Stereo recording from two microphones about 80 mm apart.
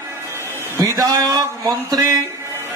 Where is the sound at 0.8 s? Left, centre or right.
Right.